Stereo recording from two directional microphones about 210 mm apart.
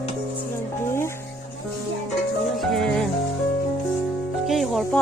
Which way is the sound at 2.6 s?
Centre (ahead or behind).